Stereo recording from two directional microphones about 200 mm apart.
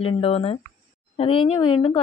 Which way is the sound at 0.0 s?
30° left (ahead or behind).